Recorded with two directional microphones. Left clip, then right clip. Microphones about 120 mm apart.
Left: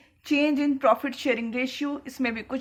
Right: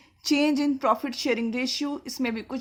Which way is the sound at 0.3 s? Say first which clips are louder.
Even; 60° right (ahead or behind).